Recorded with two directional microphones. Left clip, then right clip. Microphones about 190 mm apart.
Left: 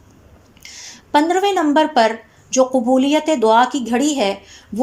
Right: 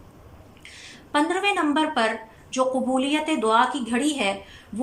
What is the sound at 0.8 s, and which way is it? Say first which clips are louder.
A woman's voice: left 7 dB; 35° left (ahead or behind).